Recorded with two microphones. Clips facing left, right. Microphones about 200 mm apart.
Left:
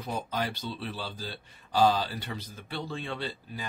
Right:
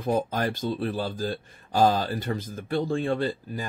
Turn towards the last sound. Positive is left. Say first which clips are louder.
# right 8 dB
turn(degrees=-45)  # may be behind; listen again after turning